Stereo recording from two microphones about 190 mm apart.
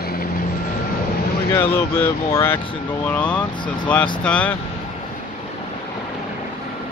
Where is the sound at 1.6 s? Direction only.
10° left (ahead or behind).